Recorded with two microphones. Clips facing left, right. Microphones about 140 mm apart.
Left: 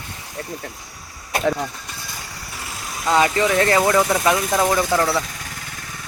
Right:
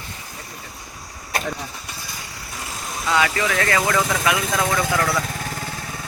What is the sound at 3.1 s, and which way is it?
Speech, 30° left (ahead or behind).